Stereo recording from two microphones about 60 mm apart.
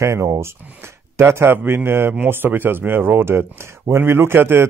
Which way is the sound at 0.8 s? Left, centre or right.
Right.